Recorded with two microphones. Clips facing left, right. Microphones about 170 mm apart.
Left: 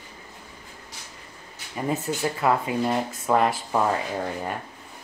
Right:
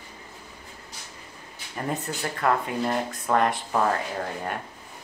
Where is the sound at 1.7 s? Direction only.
5° left (ahead or behind).